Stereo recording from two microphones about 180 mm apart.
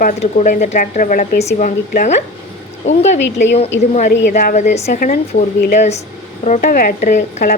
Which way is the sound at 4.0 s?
45° left (ahead or behind).